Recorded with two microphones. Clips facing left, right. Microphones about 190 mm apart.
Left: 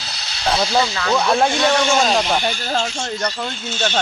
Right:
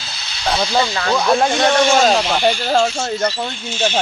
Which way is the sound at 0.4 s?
Centre (ahead or behind).